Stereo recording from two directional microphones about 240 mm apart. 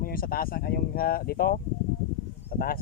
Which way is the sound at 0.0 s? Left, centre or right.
Left.